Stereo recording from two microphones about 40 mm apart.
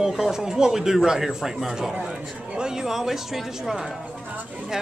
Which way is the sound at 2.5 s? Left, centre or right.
Centre.